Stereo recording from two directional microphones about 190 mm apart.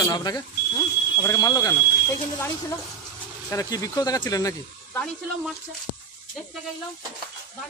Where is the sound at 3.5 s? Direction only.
15° left (ahead or behind).